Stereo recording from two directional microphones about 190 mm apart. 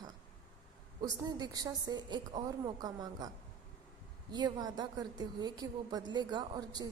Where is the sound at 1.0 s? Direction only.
20° right (ahead or behind).